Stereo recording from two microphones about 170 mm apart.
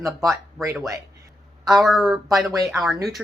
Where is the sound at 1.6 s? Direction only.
Centre (ahead or behind).